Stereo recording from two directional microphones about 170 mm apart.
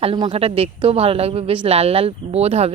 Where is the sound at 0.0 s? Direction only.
30° right (ahead or behind).